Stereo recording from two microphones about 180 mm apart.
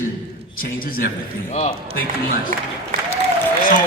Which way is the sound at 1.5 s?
40° left (ahead or behind).